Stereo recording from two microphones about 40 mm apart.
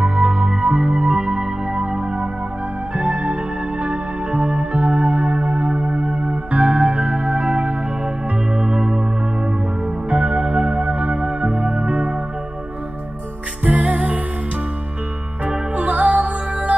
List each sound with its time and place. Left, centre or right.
0.0 s music: right
2.9 s music: right
10.0 s music: right
13.7 s music: right
15.4 s music: right